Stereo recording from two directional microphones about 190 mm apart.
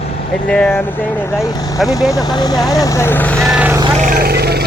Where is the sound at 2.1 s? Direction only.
20° left (ahead or behind); by 3.7 s 5° right (ahead or behind).